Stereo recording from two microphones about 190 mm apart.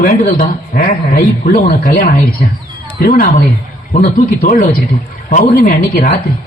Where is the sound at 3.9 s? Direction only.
40° left (ahead or behind).